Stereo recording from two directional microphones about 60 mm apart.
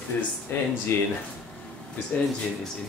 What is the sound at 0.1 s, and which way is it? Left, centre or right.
Speech, left.